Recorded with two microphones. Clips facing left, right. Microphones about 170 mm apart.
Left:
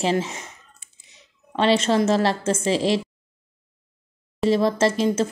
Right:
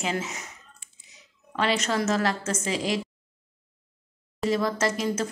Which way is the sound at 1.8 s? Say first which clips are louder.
Left 6 dB; 25° left (ahead or behind).